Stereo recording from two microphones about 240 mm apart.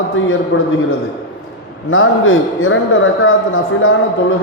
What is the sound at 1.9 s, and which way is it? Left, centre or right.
A man's voice, left.